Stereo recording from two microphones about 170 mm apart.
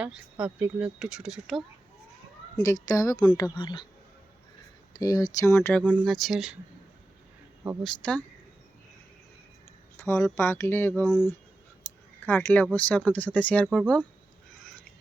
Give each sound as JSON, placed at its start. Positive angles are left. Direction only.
{"t": 0.0, "sound": "speech", "side_deg": -5}
{"t": 2.6, "sound": "speech", "side_deg": 20}
{"t": 4.9, "sound": "speech", "side_deg": 20}
{"t": 5.8, "sound": "speech", "side_deg": -5}
{"t": 8.0, "sound": "speech", "side_deg": 5}
{"t": 10.0, "sound": "speech", "side_deg": 15}
{"t": 12.2, "sound": "speech", "side_deg": 5}